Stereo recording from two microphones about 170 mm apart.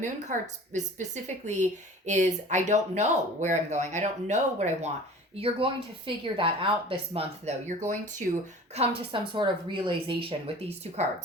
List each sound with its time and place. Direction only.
0.0 s speech: 45° right (ahead or behind)
5.4 s speech: 30° right (ahead or behind)
8.7 s speech: 35° right (ahead or behind)